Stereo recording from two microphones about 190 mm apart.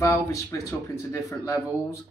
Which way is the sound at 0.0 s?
15° left (ahead or behind).